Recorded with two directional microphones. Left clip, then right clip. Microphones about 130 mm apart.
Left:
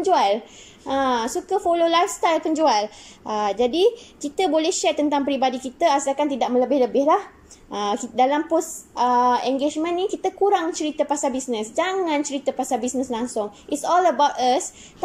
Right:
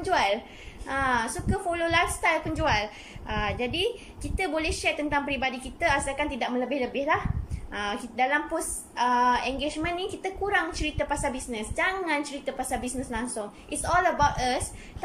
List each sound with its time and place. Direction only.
0.0 s a woman's voice: 35° left (ahead or behind); by 7.2 s 55° left (ahead or behind)
7.7 s a woman's voice: 40° left (ahead or behind)